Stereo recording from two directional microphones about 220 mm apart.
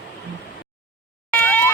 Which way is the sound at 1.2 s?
5° left (ahead or behind).